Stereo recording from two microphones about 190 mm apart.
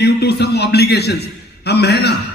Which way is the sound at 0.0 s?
60° left (ahead or behind).